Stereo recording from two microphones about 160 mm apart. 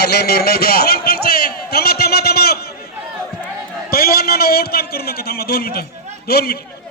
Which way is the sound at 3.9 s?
70° left (ahead or behind).